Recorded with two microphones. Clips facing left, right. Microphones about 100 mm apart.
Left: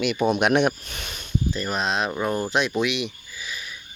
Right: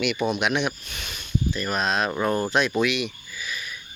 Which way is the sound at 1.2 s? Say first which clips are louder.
Even; 25° left (ahead or behind).